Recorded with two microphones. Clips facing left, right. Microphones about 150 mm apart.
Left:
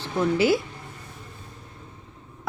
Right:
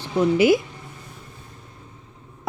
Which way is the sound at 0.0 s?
15° right (ahead or behind).